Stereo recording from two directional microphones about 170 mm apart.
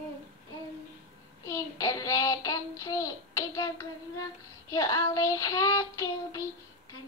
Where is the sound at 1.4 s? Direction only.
20° left (ahead or behind).